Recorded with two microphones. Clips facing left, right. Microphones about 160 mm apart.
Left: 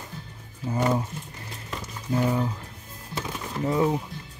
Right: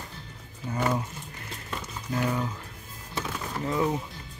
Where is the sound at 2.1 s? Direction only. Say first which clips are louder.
Left 4 dB; 25° left (ahead or behind).